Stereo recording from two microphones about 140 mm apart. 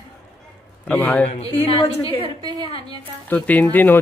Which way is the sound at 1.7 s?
40° left (ahead or behind).